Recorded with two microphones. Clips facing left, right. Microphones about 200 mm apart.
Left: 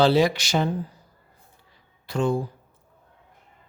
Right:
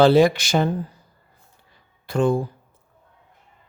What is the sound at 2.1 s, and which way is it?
Speech, 55° right (ahead or behind).